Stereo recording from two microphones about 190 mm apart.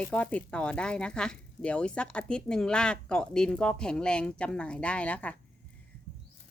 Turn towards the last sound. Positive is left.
turn(degrees=5)  # may be behind; listen again after turning